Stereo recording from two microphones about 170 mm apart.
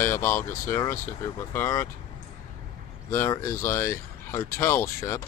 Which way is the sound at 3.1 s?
15° left (ahead or behind).